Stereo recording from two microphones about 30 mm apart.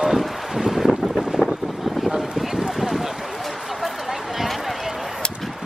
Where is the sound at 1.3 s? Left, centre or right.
Right.